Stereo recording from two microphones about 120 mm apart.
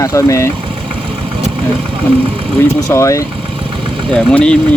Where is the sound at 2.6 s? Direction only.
20° left (ahead or behind).